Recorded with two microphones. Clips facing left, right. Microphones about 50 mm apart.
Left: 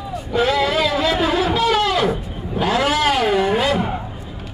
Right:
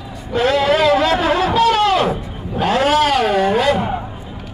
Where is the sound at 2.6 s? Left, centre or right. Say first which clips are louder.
Right 3 dB; right.